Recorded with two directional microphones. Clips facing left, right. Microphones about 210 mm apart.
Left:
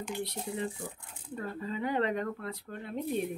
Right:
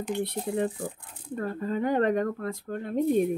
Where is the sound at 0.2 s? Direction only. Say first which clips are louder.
Right 8 dB; 55° right (ahead or behind).